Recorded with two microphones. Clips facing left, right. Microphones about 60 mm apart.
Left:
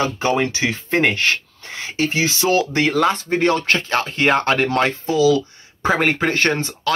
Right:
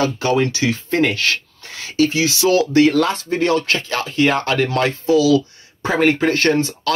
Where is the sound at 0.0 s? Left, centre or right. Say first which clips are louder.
Right 2 dB; left.